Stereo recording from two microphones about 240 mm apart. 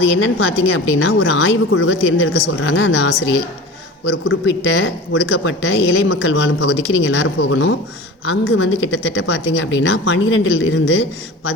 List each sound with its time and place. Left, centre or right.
0.2 s speech: left
4.4 s a woman's voice: left